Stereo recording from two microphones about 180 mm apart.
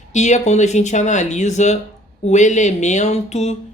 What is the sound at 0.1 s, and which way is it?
Speech, 40° left (ahead or behind).